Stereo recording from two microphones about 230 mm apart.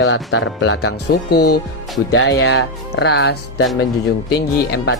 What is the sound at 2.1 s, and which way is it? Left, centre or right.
Speech, left.